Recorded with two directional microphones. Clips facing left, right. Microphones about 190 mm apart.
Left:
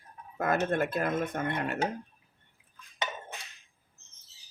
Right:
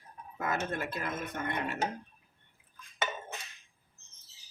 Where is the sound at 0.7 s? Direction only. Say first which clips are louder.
Left 7 dB; 50° left (ahead or behind).